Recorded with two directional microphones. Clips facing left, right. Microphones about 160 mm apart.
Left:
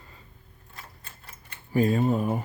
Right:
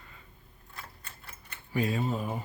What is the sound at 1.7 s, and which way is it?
Speech, 45° left (ahead or behind).